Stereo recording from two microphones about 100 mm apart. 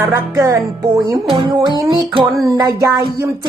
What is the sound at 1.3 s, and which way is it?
Music, 45° right (ahead or behind).